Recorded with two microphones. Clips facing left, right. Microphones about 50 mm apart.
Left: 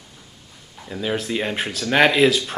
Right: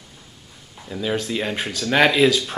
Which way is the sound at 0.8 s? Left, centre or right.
Centre.